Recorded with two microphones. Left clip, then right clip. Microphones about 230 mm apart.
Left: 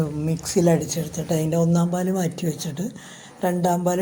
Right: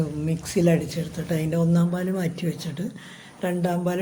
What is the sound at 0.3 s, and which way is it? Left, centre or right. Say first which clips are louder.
A woman's voice: left 2 dB; centre.